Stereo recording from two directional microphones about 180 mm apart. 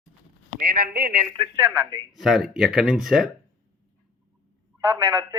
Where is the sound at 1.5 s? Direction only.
15° right (ahead or behind).